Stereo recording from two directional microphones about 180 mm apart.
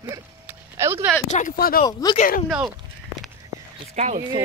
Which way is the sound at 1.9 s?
20° left (ahead or behind).